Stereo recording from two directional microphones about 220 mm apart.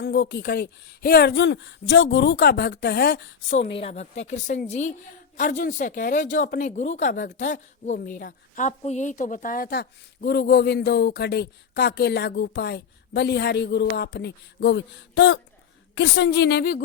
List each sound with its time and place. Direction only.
0.0 s speech: 50° left (ahead or behind)
3.8 s speech: 30° left (ahead or behind); by 16.8 s 45° left (ahead or behind)